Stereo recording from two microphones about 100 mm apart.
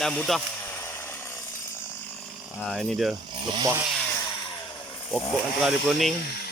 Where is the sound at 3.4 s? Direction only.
50° right (ahead or behind).